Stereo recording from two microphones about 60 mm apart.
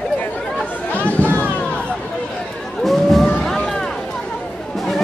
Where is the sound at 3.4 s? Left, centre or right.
Centre.